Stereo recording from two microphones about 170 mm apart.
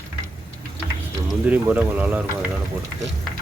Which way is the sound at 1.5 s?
10° right (ahead or behind).